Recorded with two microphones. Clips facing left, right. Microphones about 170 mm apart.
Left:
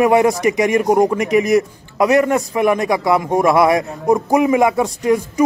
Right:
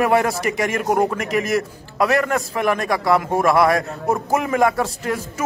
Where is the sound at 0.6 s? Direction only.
15° left (ahead or behind).